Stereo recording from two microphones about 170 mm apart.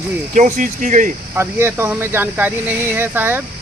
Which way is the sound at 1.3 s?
15° right (ahead or behind).